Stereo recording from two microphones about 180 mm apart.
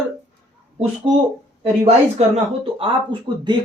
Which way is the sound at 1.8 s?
35° right (ahead or behind).